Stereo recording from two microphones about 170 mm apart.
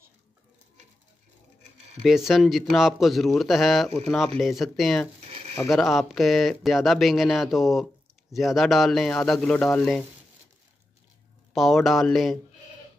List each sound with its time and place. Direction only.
2.0 s speech: centre (ahead or behind)
5.3 s a sound: 35° right (ahead or behind)
5.7 s speech: centre (ahead or behind)
11.5 s speech: centre (ahead or behind)